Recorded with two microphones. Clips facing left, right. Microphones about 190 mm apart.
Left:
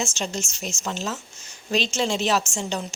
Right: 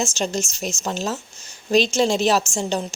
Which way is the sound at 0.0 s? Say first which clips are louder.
Right 5 dB; 40° right (ahead or behind).